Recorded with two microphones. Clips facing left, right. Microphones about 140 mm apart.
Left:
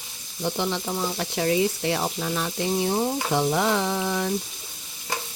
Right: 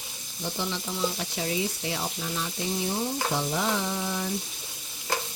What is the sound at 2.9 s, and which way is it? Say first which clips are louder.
Frying: left 5 dB; 60° left (ahead or behind).